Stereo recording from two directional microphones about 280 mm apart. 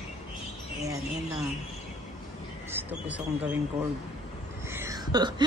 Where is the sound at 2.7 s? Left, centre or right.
Centre.